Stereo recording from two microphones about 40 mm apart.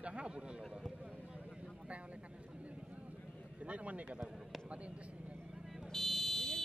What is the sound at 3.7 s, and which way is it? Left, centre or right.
Speech, right.